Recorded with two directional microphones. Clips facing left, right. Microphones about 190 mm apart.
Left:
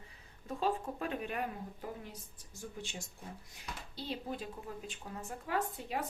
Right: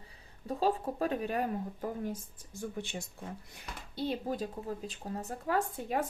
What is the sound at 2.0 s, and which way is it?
Speech, 50° right (ahead or behind).